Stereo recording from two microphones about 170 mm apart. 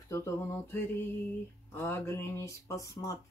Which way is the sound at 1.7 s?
15° left (ahead or behind).